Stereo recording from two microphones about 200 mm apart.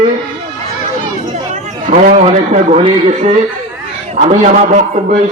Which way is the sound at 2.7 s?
30° right (ahead or behind).